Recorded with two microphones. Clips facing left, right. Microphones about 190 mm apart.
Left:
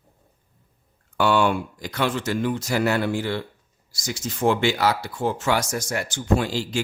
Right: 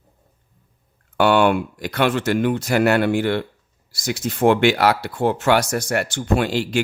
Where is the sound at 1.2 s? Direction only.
65° right (ahead or behind).